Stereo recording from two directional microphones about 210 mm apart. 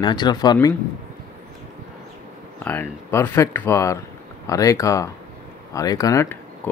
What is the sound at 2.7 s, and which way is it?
Speech, 10° left (ahead or behind).